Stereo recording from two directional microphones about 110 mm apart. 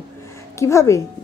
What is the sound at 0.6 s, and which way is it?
Speech, 25° left (ahead or behind).